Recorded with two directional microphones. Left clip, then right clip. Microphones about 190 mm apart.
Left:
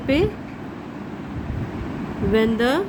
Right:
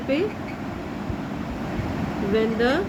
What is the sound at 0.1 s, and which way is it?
Speech, 65° left (ahead or behind).